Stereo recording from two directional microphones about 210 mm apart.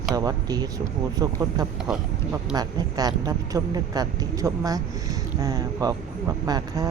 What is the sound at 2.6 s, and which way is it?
Speech, 20° right (ahead or behind).